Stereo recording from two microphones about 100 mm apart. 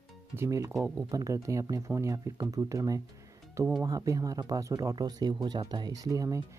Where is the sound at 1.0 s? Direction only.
35° right (ahead or behind).